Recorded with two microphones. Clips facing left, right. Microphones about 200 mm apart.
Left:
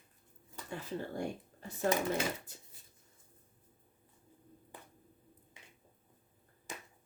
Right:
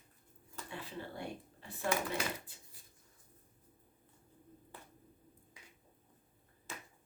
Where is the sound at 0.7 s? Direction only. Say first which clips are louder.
Left 6 dB; 45° left (ahead or behind).